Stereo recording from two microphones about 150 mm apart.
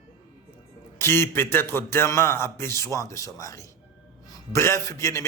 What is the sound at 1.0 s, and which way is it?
Speech, 15° left (ahead or behind).